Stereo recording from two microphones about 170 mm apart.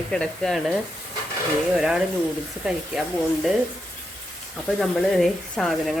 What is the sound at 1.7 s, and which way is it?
Speech, 5° right (ahead or behind).